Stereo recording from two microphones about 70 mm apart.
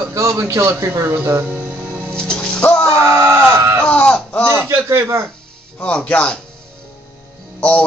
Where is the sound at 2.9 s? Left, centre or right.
Right.